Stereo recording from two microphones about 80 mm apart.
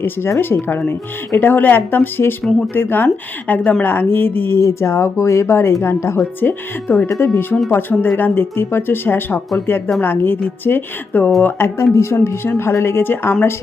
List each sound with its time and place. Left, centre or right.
0.0 s speech: left
6.4 s speech: left